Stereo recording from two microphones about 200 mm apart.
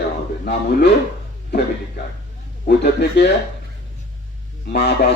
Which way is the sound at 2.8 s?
55° left (ahead or behind).